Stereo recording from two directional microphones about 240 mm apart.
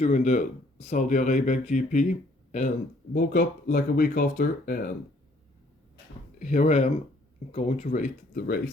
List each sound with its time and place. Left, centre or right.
0.0 s speech: left
6.4 s speech: left